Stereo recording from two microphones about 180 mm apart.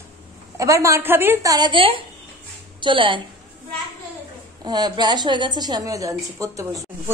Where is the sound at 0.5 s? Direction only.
15° right (ahead or behind).